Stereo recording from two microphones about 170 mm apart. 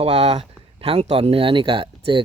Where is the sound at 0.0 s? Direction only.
35° right (ahead or behind).